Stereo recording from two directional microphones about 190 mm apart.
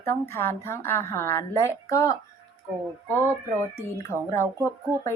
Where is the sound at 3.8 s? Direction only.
15° left (ahead or behind).